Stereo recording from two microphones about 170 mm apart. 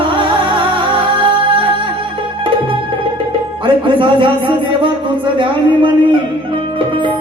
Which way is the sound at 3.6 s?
30° right (ahead or behind).